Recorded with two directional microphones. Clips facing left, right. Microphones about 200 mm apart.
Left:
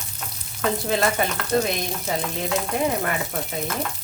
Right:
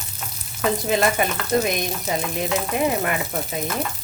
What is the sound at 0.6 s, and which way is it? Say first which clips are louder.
Speech: right 2 dB; 15° right (ahead or behind).